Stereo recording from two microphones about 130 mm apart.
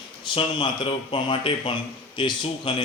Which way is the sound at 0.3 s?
35° left (ahead or behind).